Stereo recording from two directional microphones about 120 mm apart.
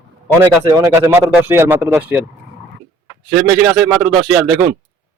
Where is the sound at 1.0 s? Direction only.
20° right (ahead or behind).